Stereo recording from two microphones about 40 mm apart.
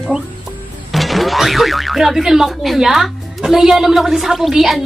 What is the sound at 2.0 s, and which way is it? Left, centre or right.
A woman's voice, centre.